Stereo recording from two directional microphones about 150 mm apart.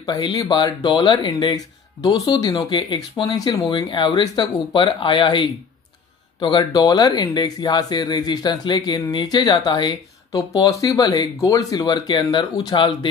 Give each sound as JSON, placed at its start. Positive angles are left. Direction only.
{"t": 0.0, "sound": "speech", "side_deg": 25}